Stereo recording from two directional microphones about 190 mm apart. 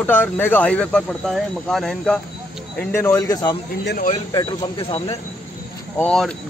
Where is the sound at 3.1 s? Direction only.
20° left (ahead or behind).